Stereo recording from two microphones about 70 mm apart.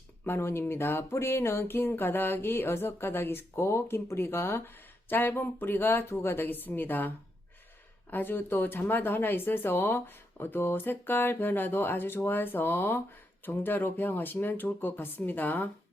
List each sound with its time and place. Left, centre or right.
0.3 s speech: left
8.1 s speech: left